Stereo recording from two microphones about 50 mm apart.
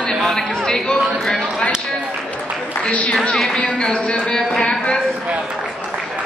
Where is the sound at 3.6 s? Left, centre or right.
Left.